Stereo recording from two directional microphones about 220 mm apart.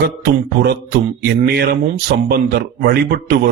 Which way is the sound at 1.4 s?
45° right (ahead or behind).